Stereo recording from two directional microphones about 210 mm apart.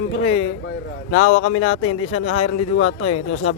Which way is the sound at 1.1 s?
90° left.